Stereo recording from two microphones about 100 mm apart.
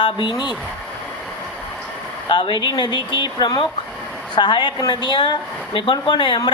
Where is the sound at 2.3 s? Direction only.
50° left (ahead or behind).